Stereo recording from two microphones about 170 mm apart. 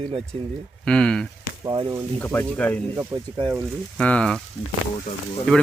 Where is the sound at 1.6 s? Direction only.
25° right (ahead or behind).